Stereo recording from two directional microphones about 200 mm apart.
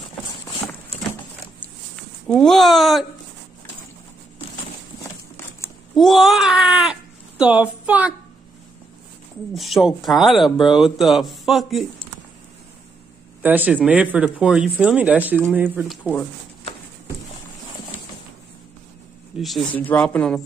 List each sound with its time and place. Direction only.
1.6 s a sound: 5° left (ahead or behind)
5.9 s speech: centre (ahead or behind)
9.6 s speech: centre (ahead or behind)
13.4 s speech: 10° right (ahead or behind)
19.3 s speech: centre (ahead or behind)